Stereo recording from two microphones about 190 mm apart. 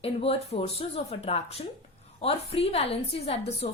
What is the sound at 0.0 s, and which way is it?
A woman's voice, 30° left (ahead or behind).